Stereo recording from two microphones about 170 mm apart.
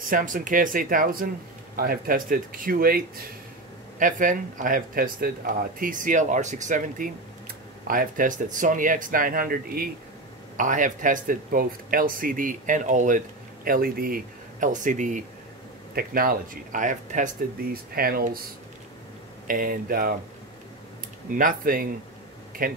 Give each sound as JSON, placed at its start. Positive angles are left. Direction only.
{"t": 0.0, "sound": "speech", "side_deg": -50}
{"t": 4.0, "sound": "speech", "side_deg": -50}
{"t": 13.7, "sound": "speech", "side_deg": -60}
{"t": 15.9, "sound": "speech", "side_deg": -60}
{"t": 17.9, "sound": "speech", "side_deg": -60}
{"t": 19.4, "sound": "speech", "side_deg": -55}
{"t": 21.4, "sound": "speech", "side_deg": -55}